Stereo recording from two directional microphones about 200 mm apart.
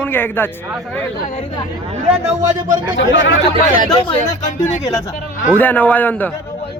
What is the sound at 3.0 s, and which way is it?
Speech, 65° left (ahead or behind).